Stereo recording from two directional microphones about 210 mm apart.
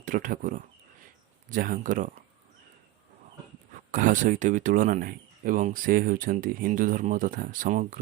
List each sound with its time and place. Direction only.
0.0 s speech: 40° right (ahead or behind)
3.9 s speech: 40° right (ahead or behind)